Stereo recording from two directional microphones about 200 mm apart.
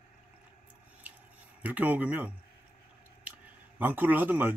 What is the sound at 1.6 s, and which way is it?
A man's voice, 10° right (ahead or behind).